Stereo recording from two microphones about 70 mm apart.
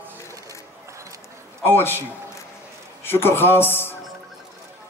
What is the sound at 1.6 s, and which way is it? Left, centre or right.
A man's voice, left.